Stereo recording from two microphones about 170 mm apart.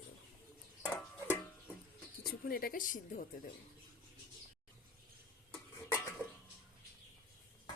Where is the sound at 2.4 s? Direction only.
60° left (ahead or behind).